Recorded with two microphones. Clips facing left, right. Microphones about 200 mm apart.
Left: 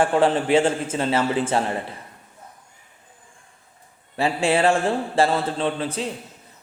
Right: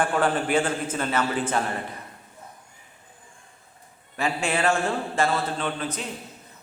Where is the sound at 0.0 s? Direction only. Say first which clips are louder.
Left 5 dB; 25° left (ahead or behind).